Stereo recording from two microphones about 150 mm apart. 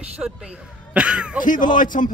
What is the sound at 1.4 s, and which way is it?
Speech, 60° left (ahead or behind).